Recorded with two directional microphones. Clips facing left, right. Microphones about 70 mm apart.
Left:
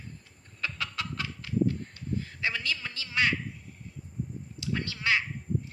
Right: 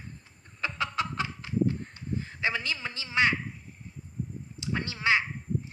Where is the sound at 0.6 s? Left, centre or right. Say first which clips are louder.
Right 4 dB; right.